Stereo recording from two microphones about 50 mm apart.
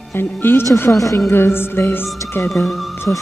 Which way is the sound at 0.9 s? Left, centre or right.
Left.